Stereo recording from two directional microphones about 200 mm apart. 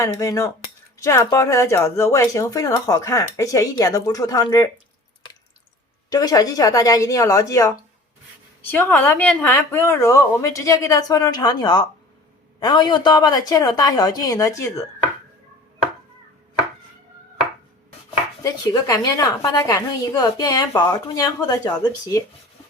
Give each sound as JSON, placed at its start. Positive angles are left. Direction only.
{"t": 0.2, "sound": "speech", "side_deg": 15}
{"t": 6.1, "sound": "speech", "side_deg": 20}
{"t": 8.7, "sound": "a woman's voice", "side_deg": 10}
{"t": 18.4, "sound": "a woman's voice", "side_deg": 15}